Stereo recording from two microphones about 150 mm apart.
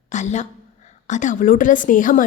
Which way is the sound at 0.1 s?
50° left (ahead or behind).